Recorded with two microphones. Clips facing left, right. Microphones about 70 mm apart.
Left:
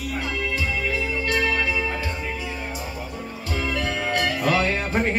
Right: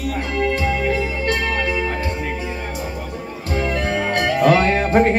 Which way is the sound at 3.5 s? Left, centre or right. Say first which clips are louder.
Right 5 dB; right.